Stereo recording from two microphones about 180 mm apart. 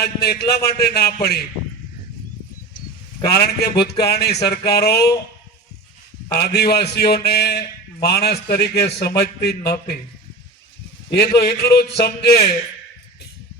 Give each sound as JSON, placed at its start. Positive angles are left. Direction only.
{"t": 0.0, "sound": "a man's voice", "side_deg": 60}
{"t": 3.2, "sound": "a man's voice", "side_deg": 60}
{"t": 6.3, "sound": "a man's voice", "side_deg": 65}
{"t": 11.1, "sound": "a man's voice", "side_deg": 65}